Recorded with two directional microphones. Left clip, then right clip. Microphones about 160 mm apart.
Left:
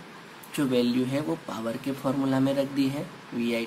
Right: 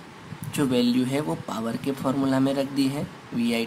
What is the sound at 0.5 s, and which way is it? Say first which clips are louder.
Speech: right 2 dB; 30° right (ahead or behind).